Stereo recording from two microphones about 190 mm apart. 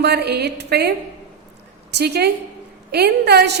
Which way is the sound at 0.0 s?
60° right (ahead or behind).